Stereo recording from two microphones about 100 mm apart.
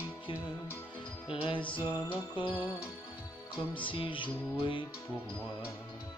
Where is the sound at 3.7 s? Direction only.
60° left (ahead or behind).